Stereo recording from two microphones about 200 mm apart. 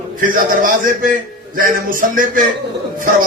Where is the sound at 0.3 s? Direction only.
45° right (ahead or behind).